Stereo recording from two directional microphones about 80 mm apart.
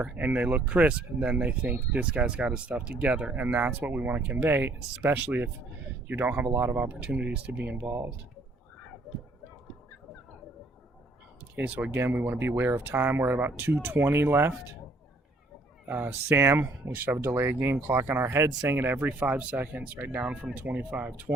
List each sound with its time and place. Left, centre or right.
0.0 s speech: centre
11.5 s speech: centre
15.9 s speech: right